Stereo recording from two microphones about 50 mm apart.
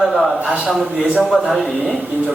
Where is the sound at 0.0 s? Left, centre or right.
Centre.